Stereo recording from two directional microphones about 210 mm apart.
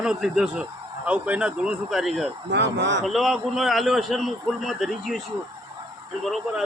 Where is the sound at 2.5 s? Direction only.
55° right (ahead or behind).